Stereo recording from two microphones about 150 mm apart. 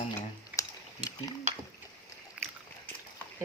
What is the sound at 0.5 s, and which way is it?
Typing, 10° right (ahead or behind).